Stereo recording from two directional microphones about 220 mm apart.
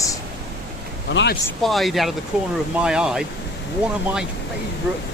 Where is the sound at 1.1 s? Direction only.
50° left (ahead or behind).